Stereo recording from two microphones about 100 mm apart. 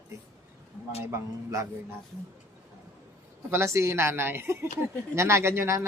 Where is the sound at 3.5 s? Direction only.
25° right (ahead or behind).